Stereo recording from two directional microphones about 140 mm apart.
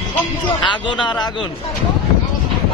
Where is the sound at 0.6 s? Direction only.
35° left (ahead or behind).